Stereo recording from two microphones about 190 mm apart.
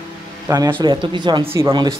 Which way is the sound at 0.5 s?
15° right (ahead or behind).